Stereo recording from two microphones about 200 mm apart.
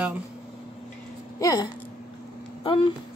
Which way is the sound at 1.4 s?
20° left (ahead or behind).